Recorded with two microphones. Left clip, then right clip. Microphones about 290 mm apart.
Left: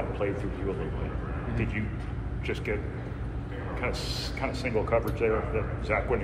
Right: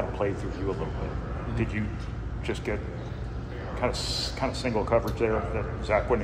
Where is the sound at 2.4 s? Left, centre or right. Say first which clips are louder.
Right 1 dB; right.